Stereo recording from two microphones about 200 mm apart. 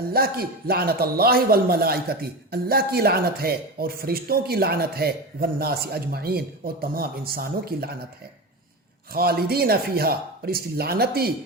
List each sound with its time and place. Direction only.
0.1 s a man's voice: 50° right (ahead or behind)
9.1 s a man's voice: 50° right (ahead or behind)